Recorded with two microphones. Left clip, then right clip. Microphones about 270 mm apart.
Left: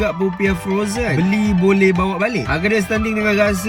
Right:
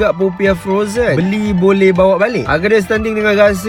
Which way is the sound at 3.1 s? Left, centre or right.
Right.